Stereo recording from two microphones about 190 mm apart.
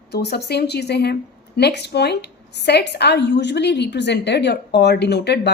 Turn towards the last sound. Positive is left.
turn(degrees=60)  # may be behind; listen again after turning